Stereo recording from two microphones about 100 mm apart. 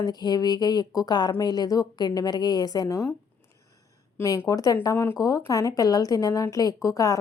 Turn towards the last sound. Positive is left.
turn(degrees=35)  # may be behind; listen again after turning